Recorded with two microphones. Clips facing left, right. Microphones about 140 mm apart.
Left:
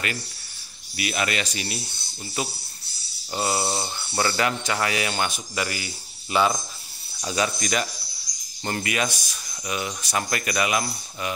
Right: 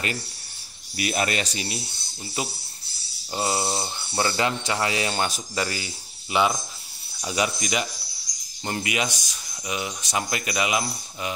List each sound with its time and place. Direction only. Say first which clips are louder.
0.9 s speech: right 1 dB; 35° right (ahead or behind)
3.3 s speech: even; 20° right (ahead or behind)
3.7 s speech: even; 10° right (ahead or behind)
4.2 s speech: even; 25° right (ahead or behind)
6.3 s speech: left 1 dB; 15° right (ahead or behind)